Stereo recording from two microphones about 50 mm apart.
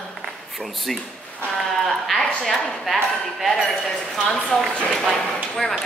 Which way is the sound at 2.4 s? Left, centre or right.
Centre.